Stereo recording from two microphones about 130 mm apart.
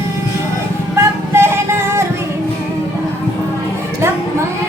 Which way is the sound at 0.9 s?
20° right (ahead or behind).